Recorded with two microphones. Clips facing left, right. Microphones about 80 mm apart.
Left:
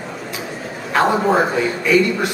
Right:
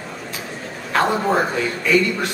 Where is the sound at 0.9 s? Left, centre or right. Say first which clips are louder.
Left 3 dB; centre.